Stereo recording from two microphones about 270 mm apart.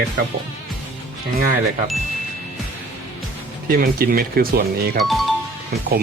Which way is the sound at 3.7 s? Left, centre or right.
Right.